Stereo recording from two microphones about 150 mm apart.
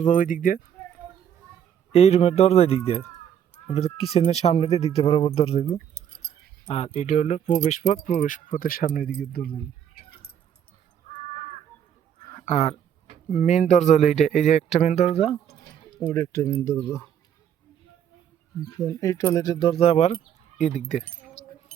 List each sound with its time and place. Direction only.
0.0 s speech: 60° left (ahead or behind)
1.9 s speech: 45° left (ahead or behind); by 9.1 s 70° left (ahead or behind)
9.3 s speech: 90° left
12.4 s speech: 50° left (ahead or behind)
16.0 s speech: 15° left (ahead or behind)
18.6 s speech: 25° left (ahead or behind); by 21.0 s 55° left (ahead or behind)